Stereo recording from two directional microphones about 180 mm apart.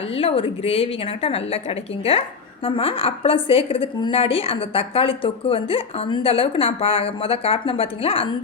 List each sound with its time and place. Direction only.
0.1 s a woman's voice: 30° left (ahead or behind)